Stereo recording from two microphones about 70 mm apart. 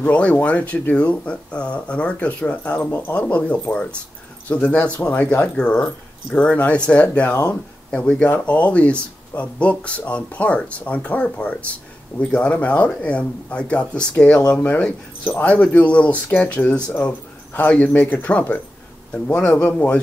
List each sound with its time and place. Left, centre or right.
0.0 s speech: centre